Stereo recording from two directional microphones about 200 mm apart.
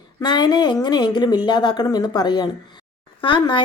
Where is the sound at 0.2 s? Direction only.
20° left (ahead or behind).